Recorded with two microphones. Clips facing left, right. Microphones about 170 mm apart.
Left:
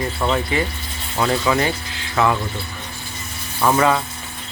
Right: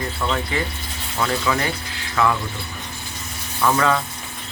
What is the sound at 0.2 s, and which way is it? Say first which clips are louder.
Speech: left 3 dB; 25° left (ahead or behind).